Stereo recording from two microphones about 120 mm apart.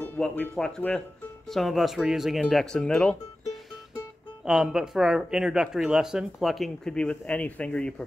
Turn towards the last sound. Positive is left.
turn(degrees=10)  # may be behind; listen again after turning